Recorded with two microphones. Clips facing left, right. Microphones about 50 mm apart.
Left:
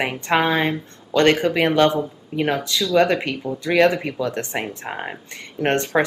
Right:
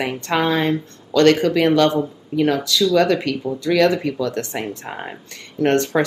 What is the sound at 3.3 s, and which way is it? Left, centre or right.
Speech, centre.